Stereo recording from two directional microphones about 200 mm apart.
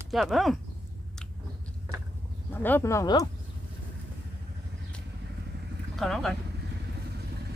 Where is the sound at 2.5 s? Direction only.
10° left (ahead or behind).